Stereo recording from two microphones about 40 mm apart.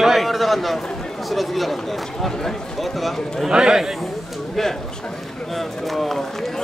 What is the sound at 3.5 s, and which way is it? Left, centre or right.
Speech, centre.